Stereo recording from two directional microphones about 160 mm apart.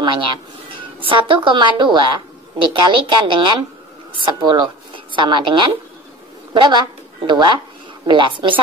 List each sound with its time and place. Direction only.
0.0 s a woman's voice: 30° right (ahead or behind)